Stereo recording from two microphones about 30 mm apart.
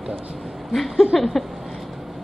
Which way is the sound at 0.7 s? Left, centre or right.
Centre.